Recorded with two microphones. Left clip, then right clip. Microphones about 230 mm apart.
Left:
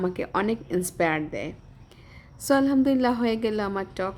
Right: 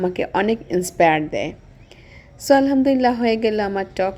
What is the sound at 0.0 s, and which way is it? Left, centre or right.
A woman's voice, centre.